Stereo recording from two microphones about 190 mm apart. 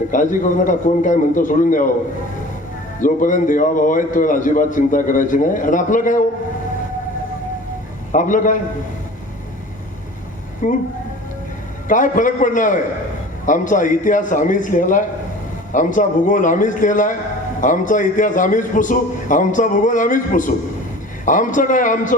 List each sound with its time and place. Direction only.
0.1 s a man's voice: 45° left (ahead or behind)
3.0 s a man's voice: 45° left (ahead or behind)
8.1 s a man's voice: 45° left (ahead or behind)
10.6 s speech: 40° left (ahead or behind)
11.9 s a man's voice: 45° left (ahead or behind)